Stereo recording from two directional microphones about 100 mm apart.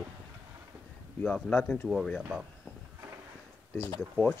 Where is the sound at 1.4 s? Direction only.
10° left (ahead or behind).